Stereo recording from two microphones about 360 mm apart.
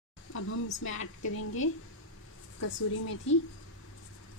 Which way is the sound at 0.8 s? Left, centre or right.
Left.